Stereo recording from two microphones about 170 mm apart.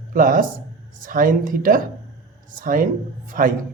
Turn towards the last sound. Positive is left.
turn(degrees=-55)  # may be behind; listen again after turning